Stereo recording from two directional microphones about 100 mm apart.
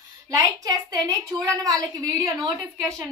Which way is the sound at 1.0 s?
35° right (ahead or behind).